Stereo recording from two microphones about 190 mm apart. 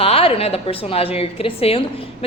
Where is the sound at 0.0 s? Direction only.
30° left (ahead or behind).